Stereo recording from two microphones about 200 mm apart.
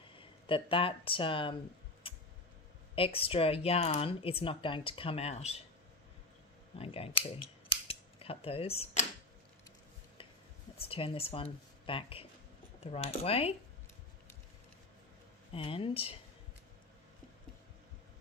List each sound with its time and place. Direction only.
0.2 s speech: 25° left (ahead or behind)
2.0 s tick: 25° left (ahead or behind)
2.9 s speech: 25° left (ahead or behind)
6.7 s scissors: 30° left (ahead or behind)
10.8 s speech: 25° left (ahead or behind)
15.5 s speech: 25° left (ahead or behind)